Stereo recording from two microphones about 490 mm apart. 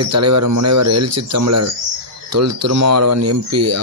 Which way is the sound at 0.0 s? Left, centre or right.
Right.